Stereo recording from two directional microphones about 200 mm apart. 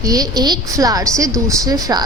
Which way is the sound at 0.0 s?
20° right (ahead or behind).